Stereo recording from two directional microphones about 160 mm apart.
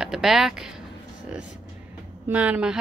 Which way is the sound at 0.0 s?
Centre (ahead or behind).